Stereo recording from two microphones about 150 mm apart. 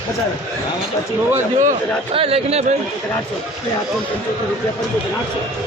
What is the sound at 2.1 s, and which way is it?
Speech, 40° right (ahead or behind).